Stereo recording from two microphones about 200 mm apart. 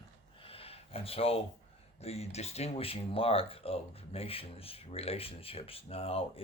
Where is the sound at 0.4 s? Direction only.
30° left (ahead or behind).